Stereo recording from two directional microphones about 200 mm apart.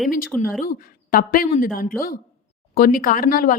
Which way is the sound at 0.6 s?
45° left (ahead or behind).